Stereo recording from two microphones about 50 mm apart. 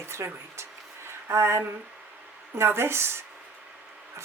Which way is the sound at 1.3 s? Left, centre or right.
Right.